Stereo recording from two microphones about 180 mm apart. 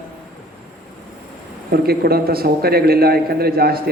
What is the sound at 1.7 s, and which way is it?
A man's voice, 55° right (ahead or behind).